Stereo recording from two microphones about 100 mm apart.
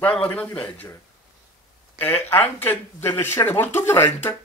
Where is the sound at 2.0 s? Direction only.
15° left (ahead or behind).